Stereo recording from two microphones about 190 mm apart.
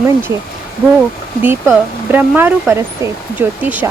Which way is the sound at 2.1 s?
10° right (ahead or behind).